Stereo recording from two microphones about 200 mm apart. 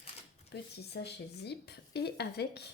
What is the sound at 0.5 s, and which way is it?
Speech, 60° left (ahead or behind).